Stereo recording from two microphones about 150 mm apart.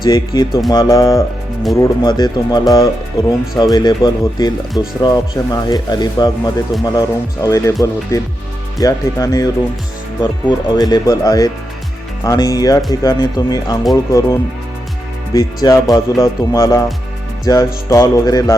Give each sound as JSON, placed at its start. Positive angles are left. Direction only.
{"t": 0.0, "sound": "speech", "side_deg": 30}
{"t": 10.8, "sound": "speech", "side_deg": 25}